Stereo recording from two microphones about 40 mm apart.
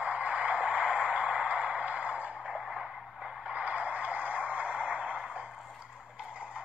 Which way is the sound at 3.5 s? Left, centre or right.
Right.